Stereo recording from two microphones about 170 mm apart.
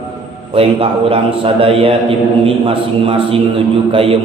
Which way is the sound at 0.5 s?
35° right (ahead or behind).